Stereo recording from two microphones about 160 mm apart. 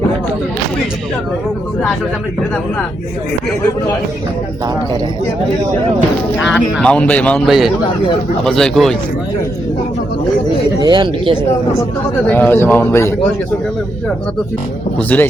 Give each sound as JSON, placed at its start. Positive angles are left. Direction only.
{"t": 6.4, "sound": "speech", "side_deg": 0}
{"t": 10.8, "sound": "speech", "side_deg": -30}
{"t": 12.3, "sound": "speech", "side_deg": 10}
{"t": 15.1, "sound": "speech", "side_deg": 10}